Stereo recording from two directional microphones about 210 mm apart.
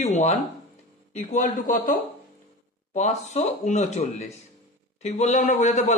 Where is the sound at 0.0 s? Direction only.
35° left (ahead or behind).